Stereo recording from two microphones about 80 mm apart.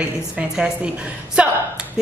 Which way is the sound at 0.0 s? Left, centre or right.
Centre.